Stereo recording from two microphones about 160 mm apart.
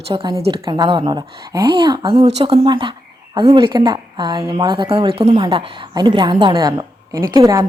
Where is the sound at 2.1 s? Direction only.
40° right (ahead or behind).